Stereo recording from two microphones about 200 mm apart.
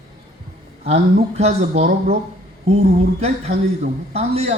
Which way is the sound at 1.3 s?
30° right (ahead or behind).